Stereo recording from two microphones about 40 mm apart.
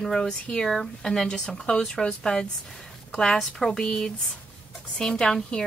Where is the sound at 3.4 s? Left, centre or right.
Centre.